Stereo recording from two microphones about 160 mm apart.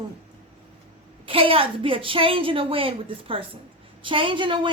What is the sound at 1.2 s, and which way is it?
Speech, 35° right (ahead or behind).